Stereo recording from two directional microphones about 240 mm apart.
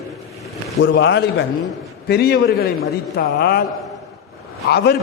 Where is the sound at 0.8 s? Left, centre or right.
Left.